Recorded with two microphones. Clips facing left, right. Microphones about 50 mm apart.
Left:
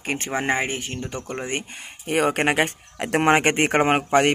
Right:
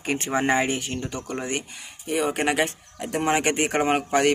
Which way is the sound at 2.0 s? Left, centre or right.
Left.